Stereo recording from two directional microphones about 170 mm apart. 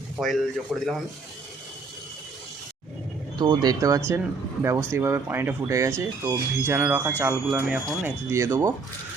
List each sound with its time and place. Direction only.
0.2 s speech: centre (ahead or behind)
3.3 s speech: 25° right (ahead or behind)